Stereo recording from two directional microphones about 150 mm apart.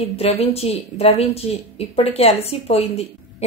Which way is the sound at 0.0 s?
45° left (ahead or behind).